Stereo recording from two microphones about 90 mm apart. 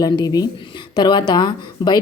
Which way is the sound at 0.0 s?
45° left (ahead or behind).